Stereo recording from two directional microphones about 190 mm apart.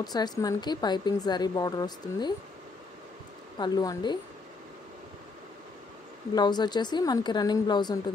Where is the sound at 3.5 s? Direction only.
20° left (ahead or behind).